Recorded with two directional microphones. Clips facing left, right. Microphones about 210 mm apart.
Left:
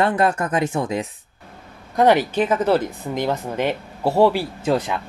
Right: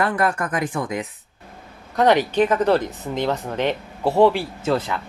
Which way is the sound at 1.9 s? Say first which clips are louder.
Left 1 dB; 10° left (ahead or behind).